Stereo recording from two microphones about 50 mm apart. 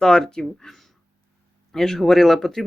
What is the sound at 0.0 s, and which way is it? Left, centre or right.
Speech, centre.